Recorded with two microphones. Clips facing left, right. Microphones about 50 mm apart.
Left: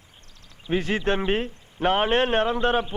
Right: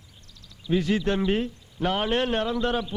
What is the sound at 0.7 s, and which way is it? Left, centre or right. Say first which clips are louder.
A man's voice: even; left.